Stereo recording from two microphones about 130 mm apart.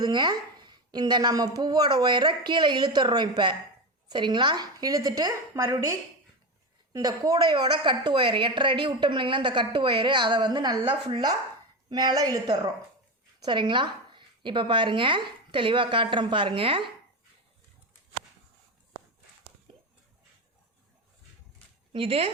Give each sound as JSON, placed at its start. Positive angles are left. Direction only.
{"t": 0.0, "sound": "a woman's voice", "side_deg": -35}
{"t": 19.7, "sound": "a sound", "side_deg": -40}
{"t": 21.9, "sound": "speech", "side_deg": -45}